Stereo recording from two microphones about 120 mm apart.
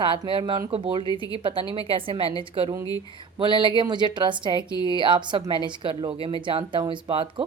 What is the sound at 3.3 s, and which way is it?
A woman's voice, 45° right (ahead or behind).